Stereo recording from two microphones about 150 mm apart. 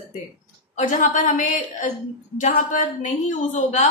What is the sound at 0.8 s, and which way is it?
A woman's voice, 55° left (ahead or behind).